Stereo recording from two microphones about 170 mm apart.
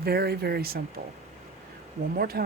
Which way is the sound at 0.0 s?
65° right (ahead or behind).